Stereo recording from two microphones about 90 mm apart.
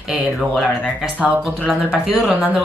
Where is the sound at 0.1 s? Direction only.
5° right (ahead or behind).